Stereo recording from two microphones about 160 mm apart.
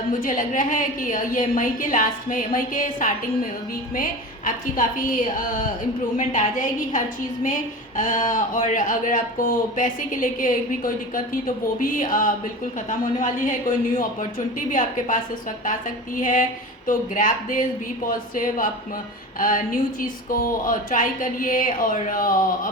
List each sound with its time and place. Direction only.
0.2 s a woman's voice: 55° left (ahead or behind)